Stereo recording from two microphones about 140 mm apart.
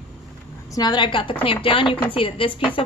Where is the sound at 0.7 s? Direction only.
30° left (ahead or behind).